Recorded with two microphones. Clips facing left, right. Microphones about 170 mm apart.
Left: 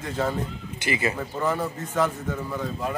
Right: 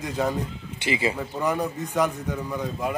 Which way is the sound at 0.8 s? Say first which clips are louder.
Right 1 dB; 25° right (ahead or behind).